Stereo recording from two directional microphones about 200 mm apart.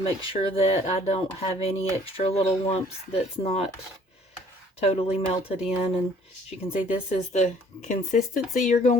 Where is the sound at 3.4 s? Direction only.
30° left (ahead or behind).